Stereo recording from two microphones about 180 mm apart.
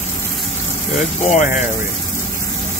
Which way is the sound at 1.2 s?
45° left (ahead or behind).